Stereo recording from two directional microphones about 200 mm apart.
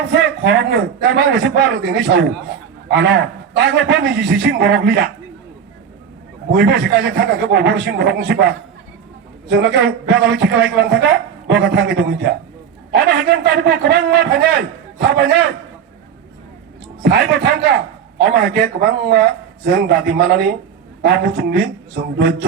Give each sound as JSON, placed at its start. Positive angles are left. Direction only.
{"t": 0.1, "sound": "a man's voice", "side_deg": -60}
{"t": 6.5, "sound": "a man's voice", "side_deg": -55}
{"t": 17.0, "sound": "a man's voice", "side_deg": -55}